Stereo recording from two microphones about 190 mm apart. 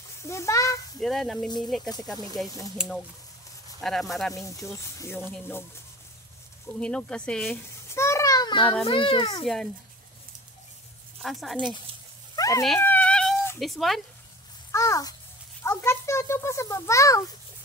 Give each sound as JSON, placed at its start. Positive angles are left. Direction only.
{"t": 0.3, "sound": "a child's voice", "side_deg": 15}
{"t": 1.0, "sound": "speech", "side_deg": 0}
{"t": 3.8, "sound": "speech", "side_deg": 0}
{"t": 4.3, "sound": "a child's voice", "side_deg": 15}
{"t": 6.8, "sound": "a child's voice", "side_deg": 5}
{"t": 11.2, "sound": "speech", "side_deg": 0}
{"t": 12.4, "sound": "a sound", "side_deg": 15}
{"t": 12.6, "sound": "a sound", "side_deg": 5}
{"t": 13.6, "sound": "speech", "side_deg": 0}
{"t": 14.7, "sound": "a child's voice", "side_deg": 15}